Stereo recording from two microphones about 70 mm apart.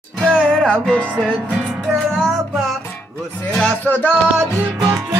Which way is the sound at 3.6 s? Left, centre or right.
Left.